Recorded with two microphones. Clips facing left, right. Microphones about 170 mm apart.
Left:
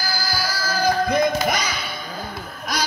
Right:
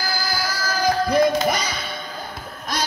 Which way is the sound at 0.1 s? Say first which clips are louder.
Left 1 dB; 50° right (ahead or behind).